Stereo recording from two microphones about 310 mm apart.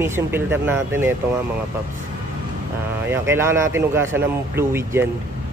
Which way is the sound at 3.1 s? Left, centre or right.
Centre.